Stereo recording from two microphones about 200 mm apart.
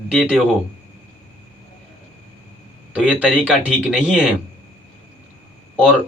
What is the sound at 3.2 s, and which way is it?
Speech, 5° right (ahead or behind).